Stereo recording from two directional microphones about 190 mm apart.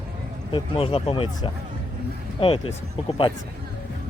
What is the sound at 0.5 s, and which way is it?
Speech, 30° left (ahead or behind).